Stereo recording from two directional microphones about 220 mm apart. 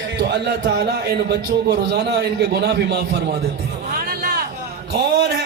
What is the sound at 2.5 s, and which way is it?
Speech, 50° right (ahead or behind).